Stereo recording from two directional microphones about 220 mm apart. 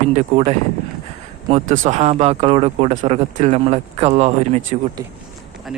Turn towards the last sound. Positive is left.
turn(degrees=-30)  # may be behind; listen again after turning